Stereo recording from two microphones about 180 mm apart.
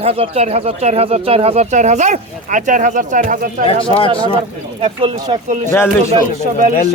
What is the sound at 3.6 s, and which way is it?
Speech, 30° left (ahead or behind).